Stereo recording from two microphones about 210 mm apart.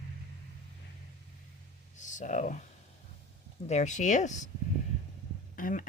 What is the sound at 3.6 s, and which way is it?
Speech, 35° left (ahead or behind).